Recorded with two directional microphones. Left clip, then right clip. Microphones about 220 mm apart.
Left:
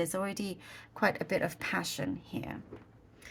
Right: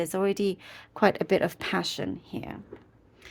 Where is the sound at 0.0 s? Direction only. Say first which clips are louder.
Right 8 dB; 35° right (ahead or behind).